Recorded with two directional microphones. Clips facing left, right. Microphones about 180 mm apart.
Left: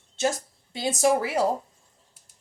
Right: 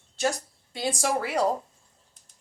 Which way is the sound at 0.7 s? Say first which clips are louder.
Left 5 dB; 25° left (ahead or behind).